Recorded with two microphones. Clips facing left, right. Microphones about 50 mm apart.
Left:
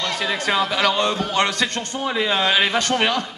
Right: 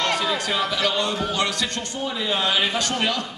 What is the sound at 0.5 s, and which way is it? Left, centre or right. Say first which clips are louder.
A man's voice: left 4 dB; left.